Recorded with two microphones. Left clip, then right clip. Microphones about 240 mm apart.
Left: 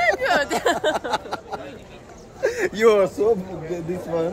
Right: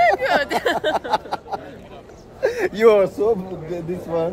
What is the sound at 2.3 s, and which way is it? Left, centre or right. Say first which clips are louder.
Speech: right 2 dB; centre.